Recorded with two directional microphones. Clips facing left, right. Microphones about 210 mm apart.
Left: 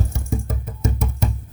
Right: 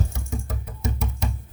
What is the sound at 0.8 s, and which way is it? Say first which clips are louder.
Music: left 4 dB; 55° left (ahead or behind).